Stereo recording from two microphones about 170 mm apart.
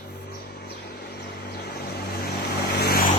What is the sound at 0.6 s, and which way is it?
Vehicle, 75° left (ahead or behind).